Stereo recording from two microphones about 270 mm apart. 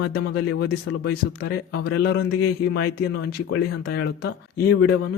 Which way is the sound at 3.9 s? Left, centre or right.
Left.